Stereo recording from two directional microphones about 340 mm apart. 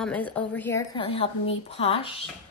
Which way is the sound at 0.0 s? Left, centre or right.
Centre.